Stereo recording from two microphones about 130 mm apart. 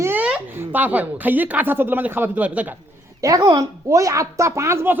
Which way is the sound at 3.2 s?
25° right (ahead or behind).